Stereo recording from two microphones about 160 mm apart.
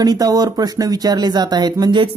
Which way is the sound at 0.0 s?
25° right (ahead or behind).